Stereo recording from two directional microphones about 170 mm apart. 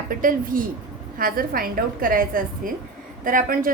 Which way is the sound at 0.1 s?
55° right (ahead or behind).